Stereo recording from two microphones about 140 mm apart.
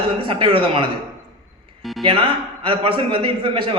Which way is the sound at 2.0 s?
40° right (ahead or behind).